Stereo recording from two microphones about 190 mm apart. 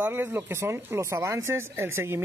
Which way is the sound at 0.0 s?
10° right (ahead or behind).